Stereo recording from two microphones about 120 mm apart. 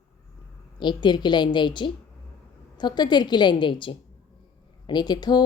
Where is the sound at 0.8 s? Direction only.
40° left (ahead or behind).